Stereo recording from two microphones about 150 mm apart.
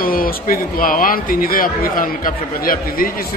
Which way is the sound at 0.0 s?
75° left (ahead or behind).